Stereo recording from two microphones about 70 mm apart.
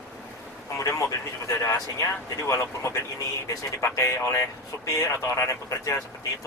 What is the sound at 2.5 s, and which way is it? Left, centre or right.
Speech, left.